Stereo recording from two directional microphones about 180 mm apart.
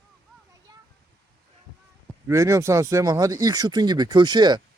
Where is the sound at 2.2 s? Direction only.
15° right (ahead or behind).